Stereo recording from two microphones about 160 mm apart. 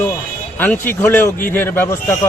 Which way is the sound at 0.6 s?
10° left (ahead or behind).